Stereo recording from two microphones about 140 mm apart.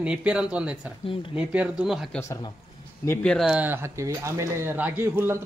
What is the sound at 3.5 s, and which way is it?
Speech, 15° right (ahead or behind).